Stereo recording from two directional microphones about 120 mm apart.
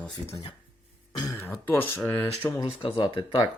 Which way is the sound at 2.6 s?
45° left (ahead or behind).